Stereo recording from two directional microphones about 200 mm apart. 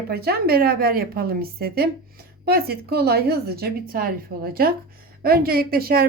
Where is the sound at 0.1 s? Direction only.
50° right (ahead or behind).